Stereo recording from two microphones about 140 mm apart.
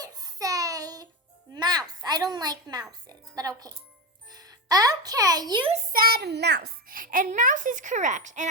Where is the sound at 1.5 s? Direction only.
30° right (ahead or behind).